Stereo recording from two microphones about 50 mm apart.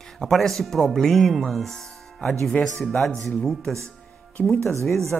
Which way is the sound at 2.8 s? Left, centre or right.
Centre.